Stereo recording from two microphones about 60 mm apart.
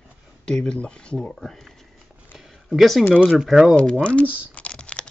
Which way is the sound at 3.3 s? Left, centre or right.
Centre.